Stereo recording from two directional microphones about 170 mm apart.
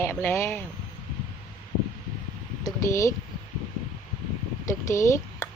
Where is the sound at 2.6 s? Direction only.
20° left (ahead or behind).